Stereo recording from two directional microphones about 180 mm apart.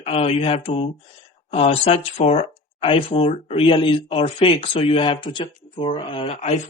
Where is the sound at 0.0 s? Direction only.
35° left (ahead or behind).